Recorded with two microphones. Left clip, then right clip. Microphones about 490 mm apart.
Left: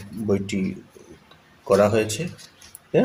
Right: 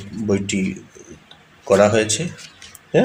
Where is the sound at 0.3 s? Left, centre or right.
Left.